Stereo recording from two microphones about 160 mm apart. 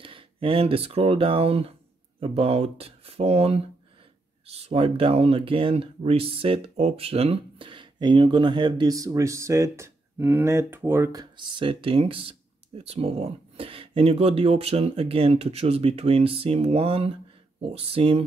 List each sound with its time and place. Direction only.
0.0 s speech: 35° right (ahead or behind)